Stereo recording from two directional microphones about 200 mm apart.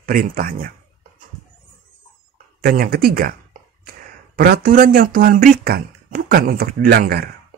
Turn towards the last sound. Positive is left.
turn(degrees=-50)  # may be behind; listen again after turning